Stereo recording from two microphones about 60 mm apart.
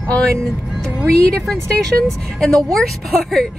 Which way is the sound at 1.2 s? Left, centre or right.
Centre.